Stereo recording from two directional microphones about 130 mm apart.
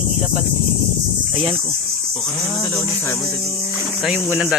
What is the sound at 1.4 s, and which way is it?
Speech, 45° right (ahead or behind).